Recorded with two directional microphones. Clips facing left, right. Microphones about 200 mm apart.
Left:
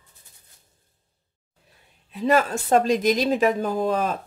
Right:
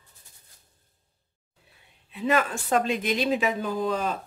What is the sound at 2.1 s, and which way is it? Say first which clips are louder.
Speech: left 4 dB; 35° left (ahead or behind).